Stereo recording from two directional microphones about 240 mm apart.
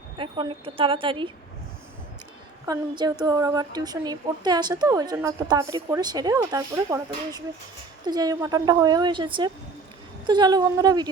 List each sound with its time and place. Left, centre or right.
0.2 s a woman's voice: centre
2.6 s a woman's voice: centre